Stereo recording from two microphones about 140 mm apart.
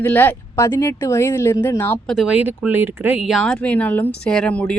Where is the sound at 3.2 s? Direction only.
Centre (ahead or behind).